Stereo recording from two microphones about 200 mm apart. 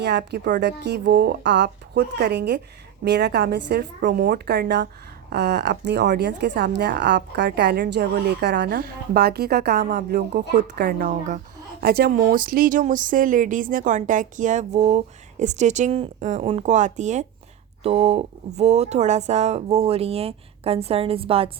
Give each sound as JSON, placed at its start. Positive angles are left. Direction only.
{"t": 0.0, "sound": "a woman's voice", "side_deg": -55}